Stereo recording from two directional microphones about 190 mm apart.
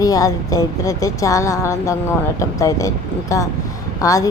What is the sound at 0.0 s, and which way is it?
A woman's voice, 20° left (ahead or behind).